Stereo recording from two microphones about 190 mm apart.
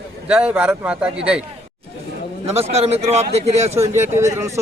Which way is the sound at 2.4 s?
35° right (ahead or behind).